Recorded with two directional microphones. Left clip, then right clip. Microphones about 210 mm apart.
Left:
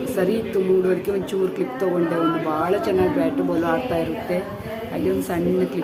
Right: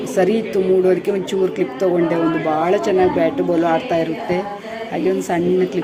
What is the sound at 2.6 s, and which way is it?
A woman's voice, 20° right (ahead or behind).